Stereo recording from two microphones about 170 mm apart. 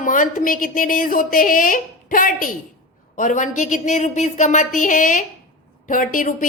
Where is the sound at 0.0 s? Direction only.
50° left (ahead or behind).